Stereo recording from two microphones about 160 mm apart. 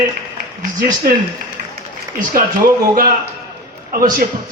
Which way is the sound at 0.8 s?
60° right (ahead or behind).